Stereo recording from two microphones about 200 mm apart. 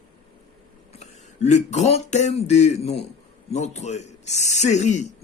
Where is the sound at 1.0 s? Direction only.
35° left (ahead or behind).